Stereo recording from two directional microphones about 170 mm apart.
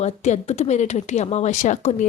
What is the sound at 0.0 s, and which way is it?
Speech, 40° left (ahead or behind).